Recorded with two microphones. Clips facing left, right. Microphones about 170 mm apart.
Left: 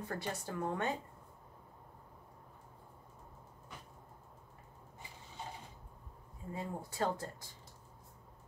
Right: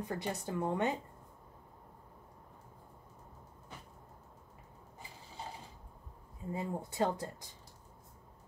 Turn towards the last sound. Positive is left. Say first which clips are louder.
# right 3 dB
turn(degrees=-20)  # may be behind; listen again after turning